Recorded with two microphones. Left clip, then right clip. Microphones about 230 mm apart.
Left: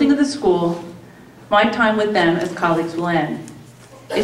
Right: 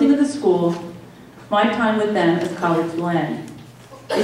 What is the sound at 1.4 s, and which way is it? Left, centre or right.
A woman's voice, centre.